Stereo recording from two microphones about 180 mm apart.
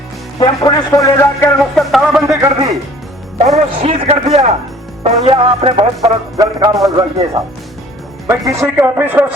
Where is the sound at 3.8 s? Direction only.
35° right (ahead or behind).